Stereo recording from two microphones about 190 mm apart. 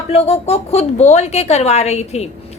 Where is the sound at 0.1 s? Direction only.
35° left (ahead or behind).